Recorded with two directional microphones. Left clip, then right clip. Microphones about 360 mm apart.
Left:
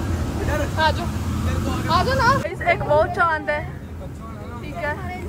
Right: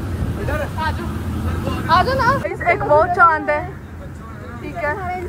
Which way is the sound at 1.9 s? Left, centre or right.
Centre.